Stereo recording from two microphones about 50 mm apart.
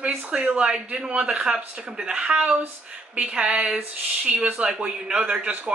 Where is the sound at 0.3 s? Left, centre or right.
Right.